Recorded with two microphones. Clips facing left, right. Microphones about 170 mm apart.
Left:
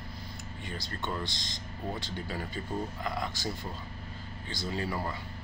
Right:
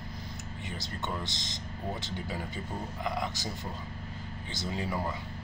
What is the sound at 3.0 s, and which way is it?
Speech, 20° right (ahead or behind).